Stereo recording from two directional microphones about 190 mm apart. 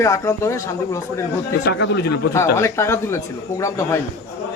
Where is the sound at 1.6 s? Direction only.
65° left (ahead or behind).